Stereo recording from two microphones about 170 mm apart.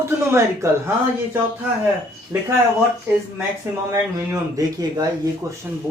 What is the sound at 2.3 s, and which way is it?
Speech, 15° right (ahead or behind).